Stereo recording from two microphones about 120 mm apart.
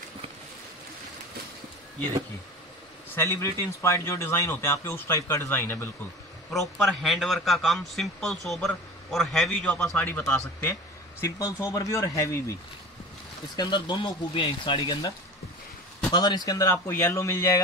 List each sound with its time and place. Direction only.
3.2 s a man's voice: 25° left (ahead or behind)
6.5 s a man's voice: centre (ahead or behind)
11.2 s a man's voice: 30° left (ahead or behind)
13.6 s a man's voice: 40° left (ahead or behind)